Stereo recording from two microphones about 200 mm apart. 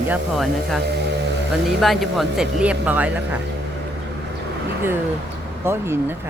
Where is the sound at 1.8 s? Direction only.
Centre (ahead or behind).